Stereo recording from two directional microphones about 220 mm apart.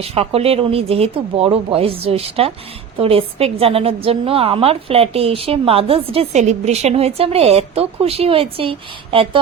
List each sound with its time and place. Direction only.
0.0 s a woman's voice: 25° right (ahead or behind)